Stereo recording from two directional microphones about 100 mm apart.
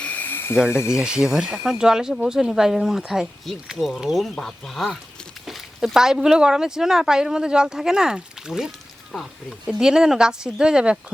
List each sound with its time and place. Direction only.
0.0 s snake: 15° left (ahead or behind)
0.9 s speech: 10° right (ahead or behind)